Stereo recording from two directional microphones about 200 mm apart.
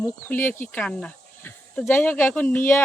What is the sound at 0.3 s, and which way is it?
Speech, 10° left (ahead or behind).